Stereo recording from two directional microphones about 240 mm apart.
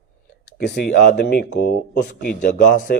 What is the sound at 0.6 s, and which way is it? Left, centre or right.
Speech, left.